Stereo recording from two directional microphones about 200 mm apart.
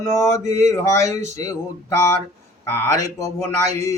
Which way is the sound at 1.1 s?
35° right (ahead or behind).